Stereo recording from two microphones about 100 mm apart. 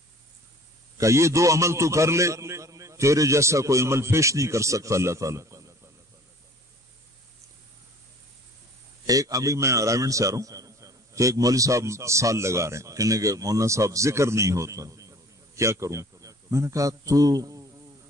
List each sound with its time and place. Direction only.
0.9 s a man's voice: 30° right (ahead or behind)
9.0 s a man's voice: 35° right (ahead or behind)